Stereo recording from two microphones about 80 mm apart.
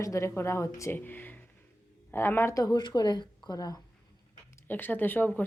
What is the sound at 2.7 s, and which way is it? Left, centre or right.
Speech, left.